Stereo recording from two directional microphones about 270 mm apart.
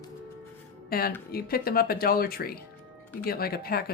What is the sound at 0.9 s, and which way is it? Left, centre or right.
Speech, left.